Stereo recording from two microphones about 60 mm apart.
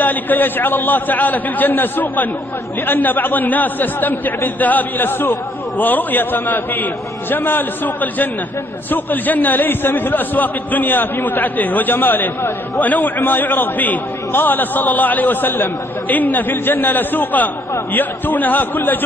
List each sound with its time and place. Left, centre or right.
0.0 s a man's voice: left